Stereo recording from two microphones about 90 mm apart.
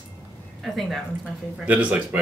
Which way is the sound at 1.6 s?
15° right (ahead or behind).